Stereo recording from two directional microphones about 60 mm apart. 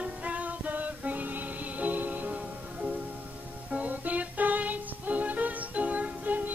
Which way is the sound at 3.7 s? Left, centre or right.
Right.